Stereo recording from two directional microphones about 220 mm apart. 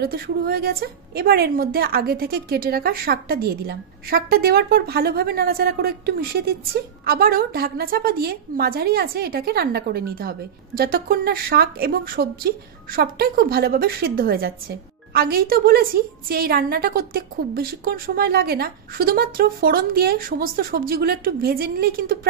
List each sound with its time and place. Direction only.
0.0 s a woman's voice: 45° right (ahead or behind)